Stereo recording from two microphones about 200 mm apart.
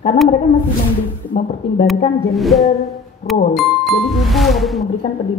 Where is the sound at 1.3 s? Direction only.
45° left (ahead or behind).